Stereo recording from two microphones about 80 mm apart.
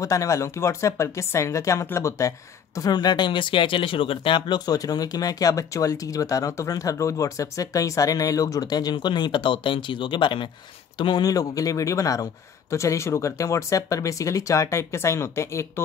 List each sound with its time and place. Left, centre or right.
0.0 s speech: left
2.9 s speech: left
4.6 s speech: left
11.0 s speech: left
11.2 s speech: left